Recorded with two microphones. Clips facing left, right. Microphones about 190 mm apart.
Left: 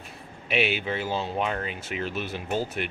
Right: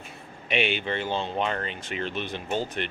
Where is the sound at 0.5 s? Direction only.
5° left (ahead or behind).